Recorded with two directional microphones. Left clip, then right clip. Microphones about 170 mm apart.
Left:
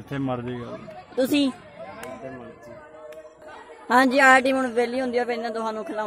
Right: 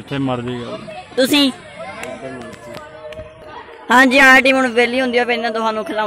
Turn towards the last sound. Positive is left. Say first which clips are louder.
# right 9 dB
turn(degrees=-5)  # may be behind; listen again after turning